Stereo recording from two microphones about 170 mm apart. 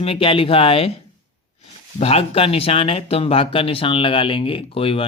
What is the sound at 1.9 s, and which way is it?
Speech, 35° left (ahead or behind).